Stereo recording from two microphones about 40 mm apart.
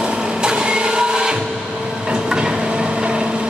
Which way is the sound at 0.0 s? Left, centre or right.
Right.